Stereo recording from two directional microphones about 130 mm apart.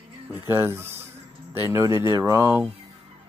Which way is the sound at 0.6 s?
20° right (ahead or behind).